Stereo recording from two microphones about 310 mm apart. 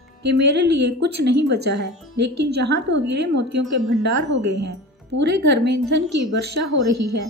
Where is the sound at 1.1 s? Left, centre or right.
Right.